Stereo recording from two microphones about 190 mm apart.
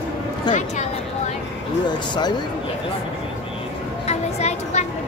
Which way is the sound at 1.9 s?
20° left (ahead or behind).